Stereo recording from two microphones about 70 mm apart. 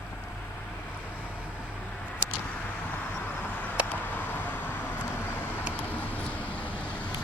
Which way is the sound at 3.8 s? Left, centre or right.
Left.